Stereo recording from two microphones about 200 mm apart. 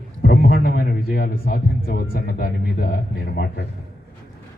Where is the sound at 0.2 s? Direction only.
45° left (ahead or behind).